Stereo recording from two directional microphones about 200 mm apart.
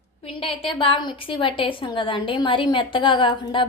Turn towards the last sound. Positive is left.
turn(degrees=25)  # may be behind; listen again after turning